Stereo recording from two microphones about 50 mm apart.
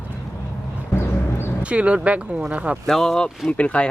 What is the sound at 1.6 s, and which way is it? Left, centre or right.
Speech, right.